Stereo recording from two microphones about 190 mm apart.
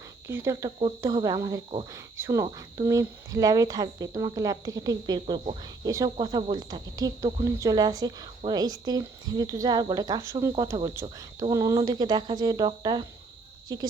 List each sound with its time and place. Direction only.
0.3 s speech: 15° right (ahead or behind)
5.2 s speech: 30° right (ahead or behind)
5.8 s speech: 20° right (ahead or behind)